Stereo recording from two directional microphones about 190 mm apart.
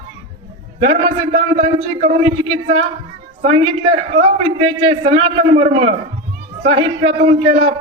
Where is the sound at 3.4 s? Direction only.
30° right (ahead or behind).